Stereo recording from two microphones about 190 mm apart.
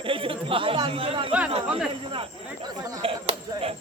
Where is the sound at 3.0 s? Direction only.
30° right (ahead or behind).